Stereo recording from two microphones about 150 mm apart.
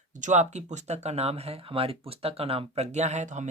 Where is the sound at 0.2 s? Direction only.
50° right (ahead or behind).